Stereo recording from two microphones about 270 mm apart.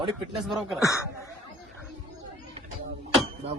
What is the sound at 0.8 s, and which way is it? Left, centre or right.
Speech, centre.